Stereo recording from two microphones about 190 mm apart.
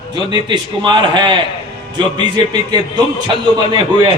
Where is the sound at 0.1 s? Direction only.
25° right (ahead or behind).